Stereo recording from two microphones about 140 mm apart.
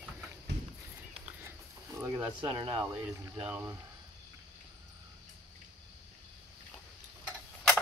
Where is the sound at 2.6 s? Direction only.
35° right (ahead or behind).